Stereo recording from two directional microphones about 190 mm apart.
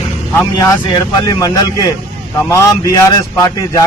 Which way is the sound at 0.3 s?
15° left (ahead or behind).